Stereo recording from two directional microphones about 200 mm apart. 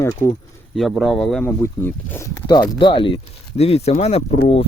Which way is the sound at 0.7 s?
Centre (ahead or behind).